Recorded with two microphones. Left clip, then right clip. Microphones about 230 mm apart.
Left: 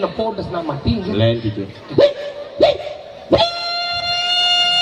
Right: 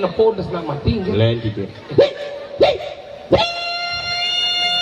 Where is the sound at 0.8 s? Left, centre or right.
Left.